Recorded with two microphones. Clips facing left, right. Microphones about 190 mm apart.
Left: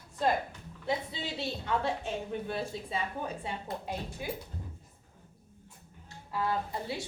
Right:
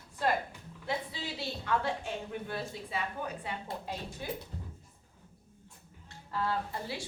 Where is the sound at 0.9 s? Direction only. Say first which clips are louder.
Left 3 dB; 20° left (ahead or behind).